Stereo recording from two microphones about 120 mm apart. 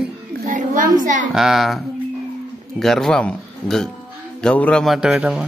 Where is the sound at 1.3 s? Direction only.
Centre (ahead or behind).